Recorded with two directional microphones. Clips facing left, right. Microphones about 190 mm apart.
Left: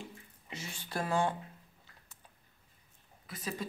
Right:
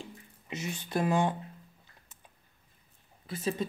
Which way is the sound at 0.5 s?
20° right (ahead or behind).